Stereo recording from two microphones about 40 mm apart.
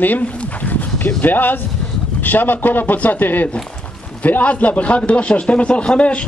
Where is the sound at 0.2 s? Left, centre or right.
Left.